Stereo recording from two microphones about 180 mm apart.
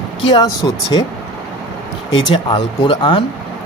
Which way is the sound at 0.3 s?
25° left (ahead or behind).